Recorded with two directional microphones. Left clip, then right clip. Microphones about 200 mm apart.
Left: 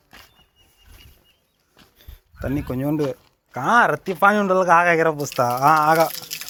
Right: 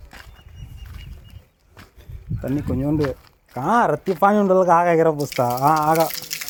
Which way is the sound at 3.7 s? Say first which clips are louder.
Left 1 dB; 15° right (ahead or behind).